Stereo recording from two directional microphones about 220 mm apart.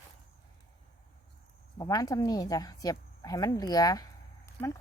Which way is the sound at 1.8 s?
15° left (ahead or behind).